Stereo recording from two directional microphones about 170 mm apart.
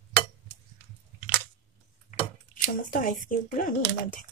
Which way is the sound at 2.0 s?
55° left (ahead or behind).